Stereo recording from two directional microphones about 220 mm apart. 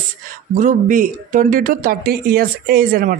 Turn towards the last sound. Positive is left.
turn(degrees=-40)  # may be behind; listen again after turning